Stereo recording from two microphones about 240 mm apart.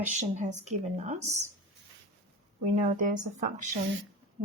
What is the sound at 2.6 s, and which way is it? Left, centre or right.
Speech, right.